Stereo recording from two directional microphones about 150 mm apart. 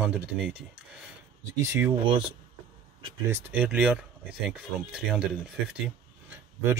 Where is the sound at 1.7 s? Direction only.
15° right (ahead or behind).